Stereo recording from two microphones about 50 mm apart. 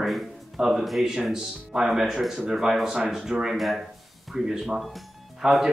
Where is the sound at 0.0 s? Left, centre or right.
Centre.